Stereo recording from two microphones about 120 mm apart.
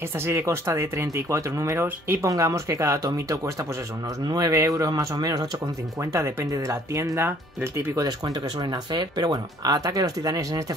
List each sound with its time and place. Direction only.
0.3 s speech: 20° right (ahead or behind)